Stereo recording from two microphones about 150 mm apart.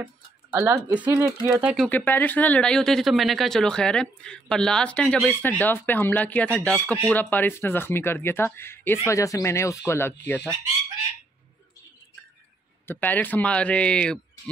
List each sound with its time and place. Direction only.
0.0 s speech: 15° right (ahead or behind)
1.5 s speech: 5° right (ahead or behind)
1.9 s speech: 10° left (ahead or behind)
12.8 s speech: 15° left (ahead or behind)